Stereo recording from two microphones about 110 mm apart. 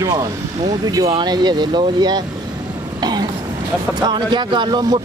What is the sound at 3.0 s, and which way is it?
Vehicle, 40° right (ahead or behind).